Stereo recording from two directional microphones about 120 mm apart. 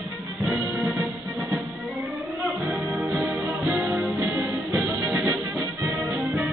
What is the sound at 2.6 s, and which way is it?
Music, 10° right (ahead or behind).